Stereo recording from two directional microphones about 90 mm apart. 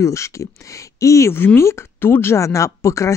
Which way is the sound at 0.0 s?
35° left (ahead or behind).